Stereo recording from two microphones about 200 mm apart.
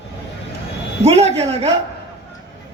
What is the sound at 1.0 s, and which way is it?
Speech, 30° right (ahead or behind).